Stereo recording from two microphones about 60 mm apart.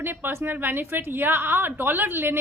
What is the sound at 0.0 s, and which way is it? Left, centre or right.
A woman's voice, right.